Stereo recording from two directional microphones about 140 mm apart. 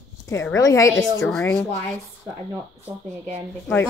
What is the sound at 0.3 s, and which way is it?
Speech, 20° left (ahead or behind).